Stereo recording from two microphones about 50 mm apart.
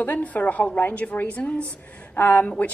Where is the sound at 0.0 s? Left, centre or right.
Left.